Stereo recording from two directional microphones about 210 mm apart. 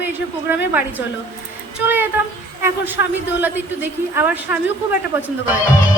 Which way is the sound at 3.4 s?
10° right (ahead or behind).